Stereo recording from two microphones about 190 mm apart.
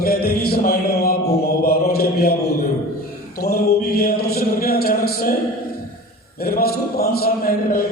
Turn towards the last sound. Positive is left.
turn(degrees=50)  # may be behind; listen again after turning